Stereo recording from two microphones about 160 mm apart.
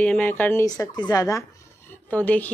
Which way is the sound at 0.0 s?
10° left (ahead or behind).